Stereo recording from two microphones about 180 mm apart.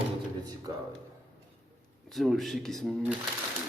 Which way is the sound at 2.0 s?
Centre (ahead or behind).